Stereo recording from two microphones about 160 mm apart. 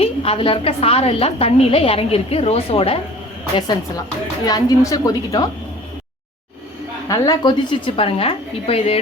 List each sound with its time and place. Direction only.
0.0 s a woman's voice: 35° left (ahead or behind)
3.5 s a woman's voice: 25° left (ahead or behind)
7.1 s a woman's voice: 25° left (ahead or behind)